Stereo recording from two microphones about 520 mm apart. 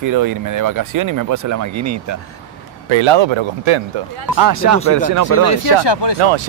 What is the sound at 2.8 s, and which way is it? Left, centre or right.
Speech, right.